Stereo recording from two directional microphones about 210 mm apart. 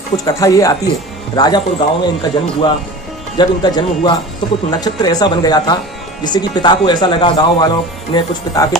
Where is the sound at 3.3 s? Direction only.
20° left (ahead or behind).